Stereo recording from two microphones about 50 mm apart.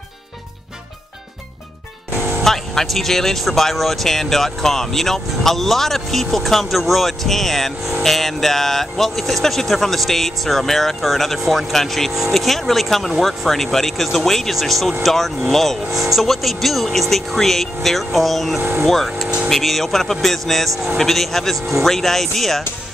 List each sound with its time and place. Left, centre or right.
2.4 s speech: centre
12.1 s speech: centre
18.6 s speech: right
18.9 s speech: centre